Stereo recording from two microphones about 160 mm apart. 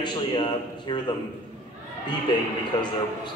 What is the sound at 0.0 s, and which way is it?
A man's voice, 30° left (ahead or behind).